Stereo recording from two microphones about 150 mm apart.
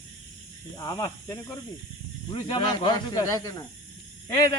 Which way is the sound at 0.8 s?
25° left (ahead or behind).